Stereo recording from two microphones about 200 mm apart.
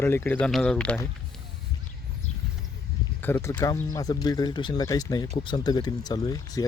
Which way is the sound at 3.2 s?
10° left (ahead or behind).